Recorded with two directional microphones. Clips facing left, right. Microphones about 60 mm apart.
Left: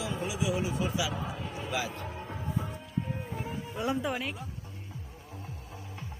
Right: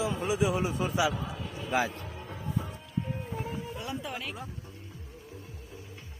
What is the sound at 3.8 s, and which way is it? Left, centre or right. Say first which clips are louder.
Speech: left 6 dB; left.